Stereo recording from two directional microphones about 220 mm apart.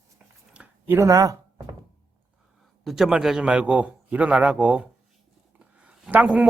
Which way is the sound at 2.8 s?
Centre (ahead or behind).